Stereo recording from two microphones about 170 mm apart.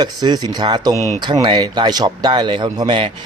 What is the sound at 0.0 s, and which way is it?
A man's voice, 25° right (ahead or behind).